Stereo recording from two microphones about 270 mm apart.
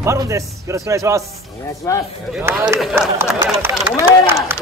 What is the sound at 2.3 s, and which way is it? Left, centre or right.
A man's voice, centre.